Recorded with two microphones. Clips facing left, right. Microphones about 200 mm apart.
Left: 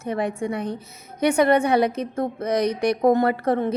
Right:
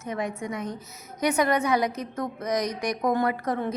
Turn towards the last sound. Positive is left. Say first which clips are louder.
# left 5 dB
turn(degrees=25)  # may be behind; listen again after turning